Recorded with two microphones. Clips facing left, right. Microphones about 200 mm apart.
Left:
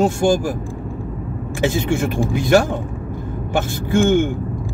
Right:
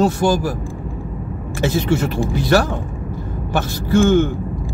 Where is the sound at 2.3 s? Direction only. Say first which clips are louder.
Left 2 dB; 15° left (ahead or behind).